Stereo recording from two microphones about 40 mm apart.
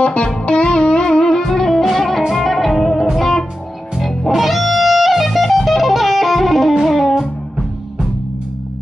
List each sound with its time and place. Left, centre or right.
0.0 s music: left; by 7.2 s centre